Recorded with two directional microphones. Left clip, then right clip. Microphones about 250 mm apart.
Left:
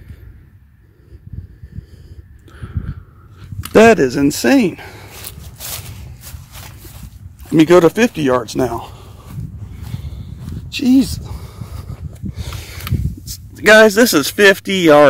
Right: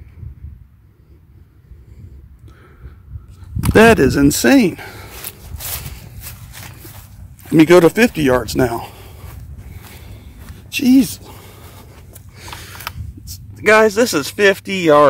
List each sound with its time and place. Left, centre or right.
3.7 s speech: centre
4.0 s walk: centre
7.4 s speech: centre
10.7 s a sound: centre
13.2 s speech: left